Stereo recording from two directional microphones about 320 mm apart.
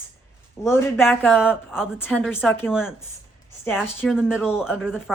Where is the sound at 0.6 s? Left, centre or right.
Centre.